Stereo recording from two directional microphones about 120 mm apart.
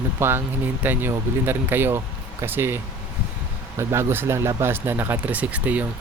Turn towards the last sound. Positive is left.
turn(degrees=-10)  # may be behind; listen again after turning